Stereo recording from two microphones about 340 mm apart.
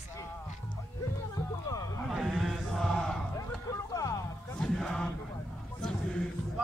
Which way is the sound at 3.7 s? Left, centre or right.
Centre.